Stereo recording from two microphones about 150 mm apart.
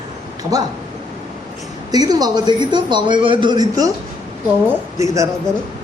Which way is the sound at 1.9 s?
25° right (ahead or behind).